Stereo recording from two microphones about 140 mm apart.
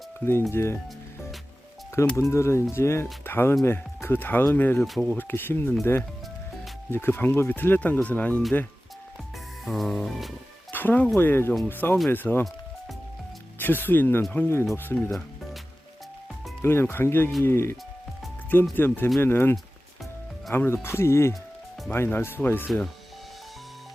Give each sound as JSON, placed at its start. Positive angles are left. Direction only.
{"t": 0.5, "sound": "speech", "side_deg": 20}
{"t": 2.1, "sound": "speech", "side_deg": 20}
{"t": 6.9, "sound": "speech", "side_deg": 15}
{"t": 9.6, "sound": "music", "side_deg": 0}
{"t": 10.7, "sound": "speech", "side_deg": 15}
{"t": 13.6, "sound": "speech", "side_deg": 15}
{"t": 16.6, "sound": "speech", "side_deg": 15}